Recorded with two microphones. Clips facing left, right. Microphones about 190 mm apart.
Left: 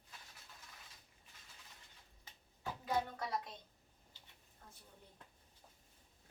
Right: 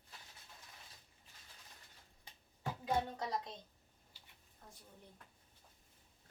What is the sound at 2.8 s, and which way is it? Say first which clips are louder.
Music: right 1 dB; 20° right (ahead or behind).